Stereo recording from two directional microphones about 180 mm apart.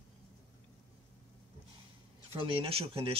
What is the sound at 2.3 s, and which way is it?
Speech, 30° right (ahead or behind).